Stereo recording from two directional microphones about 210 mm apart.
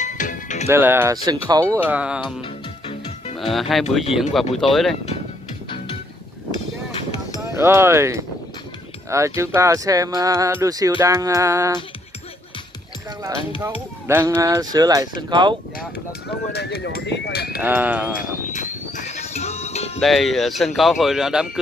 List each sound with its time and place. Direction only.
0.0 s music: 35° left (ahead or behind)
0.7 s speech: 10° right (ahead or behind)
1.7 s speech: 5° right (ahead or behind)
3.3 s speech: centre (ahead or behind)
7.5 s speech: 10° right (ahead or behind)
13.6 s speech: 10° right (ahead or behind)
16.5 s speech: 50° left (ahead or behind)
17.6 s speech: 10° right (ahead or behind)
18.5 s music: 35° left (ahead or behind)
20.0 s speech: centre (ahead or behind)